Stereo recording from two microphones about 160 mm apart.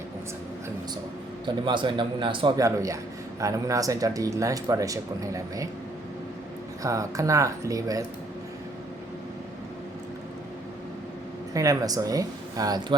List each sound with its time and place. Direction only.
1.6 s a man's voice: 30° right (ahead or behind)
2.6 s speech: 20° right (ahead or behind)
6.8 s speech: 20° right (ahead or behind)
11.5 s speech: 20° right (ahead or behind)